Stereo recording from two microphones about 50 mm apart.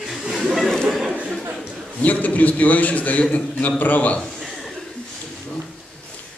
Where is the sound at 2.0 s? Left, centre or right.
Left.